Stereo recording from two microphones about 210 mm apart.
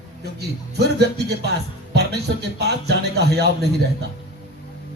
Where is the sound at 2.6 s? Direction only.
50° right (ahead or behind).